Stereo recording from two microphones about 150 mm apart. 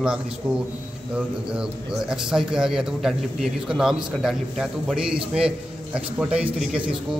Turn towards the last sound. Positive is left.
turn(degrees=-5)  # may be behind; listen again after turning